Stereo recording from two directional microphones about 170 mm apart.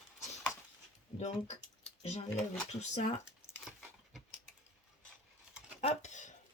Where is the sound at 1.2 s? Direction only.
40° left (ahead or behind).